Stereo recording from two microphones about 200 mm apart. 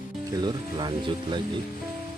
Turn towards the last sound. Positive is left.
turn(degrees=-25)  # may be behind; listen again after turning